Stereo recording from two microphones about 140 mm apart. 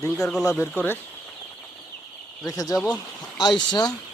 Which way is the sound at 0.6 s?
15° left (ahead or behind).